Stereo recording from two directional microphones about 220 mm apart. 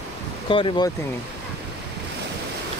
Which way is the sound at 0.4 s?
20° left (ahead or behind).